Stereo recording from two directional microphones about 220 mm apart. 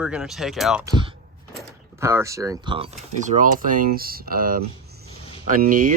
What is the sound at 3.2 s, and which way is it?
Speech, 35° right (ahead or behind).